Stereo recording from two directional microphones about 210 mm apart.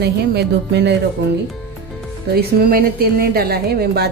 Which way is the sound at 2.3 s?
45° right (ahead or behind).